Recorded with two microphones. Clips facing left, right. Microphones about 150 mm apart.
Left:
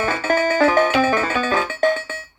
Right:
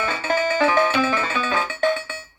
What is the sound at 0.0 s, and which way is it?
Music, 45° left (ahead or behind).